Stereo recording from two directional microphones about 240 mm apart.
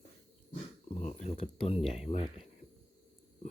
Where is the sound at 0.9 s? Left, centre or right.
Left.